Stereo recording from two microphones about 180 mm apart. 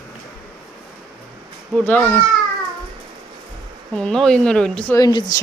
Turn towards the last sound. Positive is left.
turn(degrees=25)  # may be behind; listen again after turning